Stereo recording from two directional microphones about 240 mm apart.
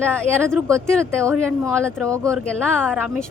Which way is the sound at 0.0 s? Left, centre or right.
Centre.